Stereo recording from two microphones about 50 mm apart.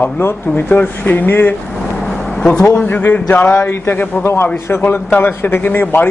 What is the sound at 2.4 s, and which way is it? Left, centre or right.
Speech, centre.